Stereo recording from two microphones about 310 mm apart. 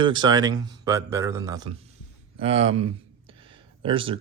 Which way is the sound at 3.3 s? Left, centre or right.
Centre.